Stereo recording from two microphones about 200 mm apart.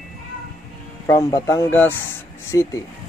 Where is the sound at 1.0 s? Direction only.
15° left (ahead or behind).